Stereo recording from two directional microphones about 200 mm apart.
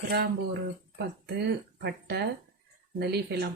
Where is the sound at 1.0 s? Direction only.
55° right (ahead or behind).